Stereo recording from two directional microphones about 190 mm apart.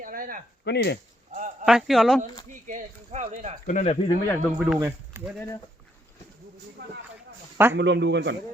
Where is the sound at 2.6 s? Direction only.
40° right (ahead or behind).